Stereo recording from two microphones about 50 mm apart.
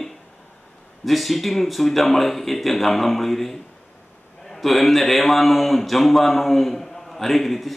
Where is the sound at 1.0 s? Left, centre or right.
Centre.